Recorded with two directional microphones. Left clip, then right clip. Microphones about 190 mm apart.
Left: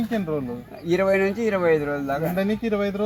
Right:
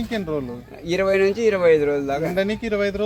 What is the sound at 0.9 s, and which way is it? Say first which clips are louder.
Speech: right 2 dB; 35° right (ahead or behind).